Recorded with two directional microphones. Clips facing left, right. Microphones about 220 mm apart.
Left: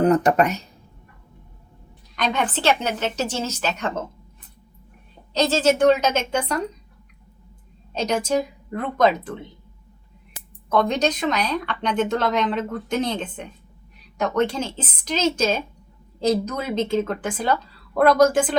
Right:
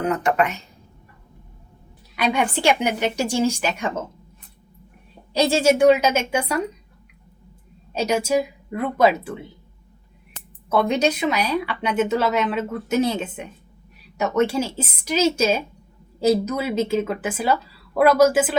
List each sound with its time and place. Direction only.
0.0 s speech: 35° left (ahead or behind)
2.1 s speech: 10° right (ahead or behind)
5.3 s speech: 10° right (ahead or behind)
7.9 s speech: 10° right (ahead or behind)
10.7 s speech: 10° right (ahead or behind)